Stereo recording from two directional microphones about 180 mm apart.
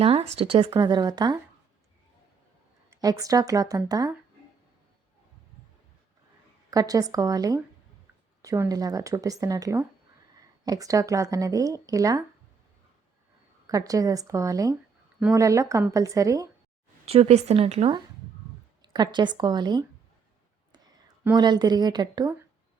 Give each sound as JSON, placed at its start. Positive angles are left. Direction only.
{"t": 0.0, "sound": "speech", "side_deg": -30}
{"t": 2.9, "sound": "speech", "side_deg": -20}
{"t": 6.7, "sound": "speech", "side_deg": -20}
{"t": 13.7, "sound": "a woman's voice", "side_deg": -20}
{"t": 17.1, "sound": "a woman's voice", "side_deg": -35}
{"t": 21.3, "sound": "speech", "side_deg": -25}